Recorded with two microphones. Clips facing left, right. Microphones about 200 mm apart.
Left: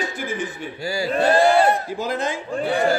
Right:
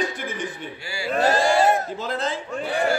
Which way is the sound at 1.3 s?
60° left (ahead or behind).